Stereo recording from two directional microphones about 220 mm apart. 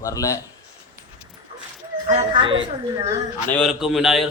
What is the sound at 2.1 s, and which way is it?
A woman's voice, 25° right (ahead or behind).